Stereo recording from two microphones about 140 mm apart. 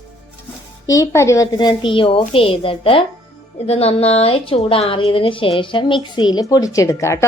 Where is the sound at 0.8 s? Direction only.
25° left (ahead or behind).